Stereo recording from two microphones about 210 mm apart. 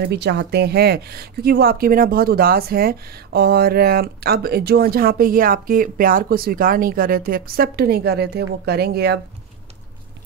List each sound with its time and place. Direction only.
0.0 s speech: 50° right (ahead or behind)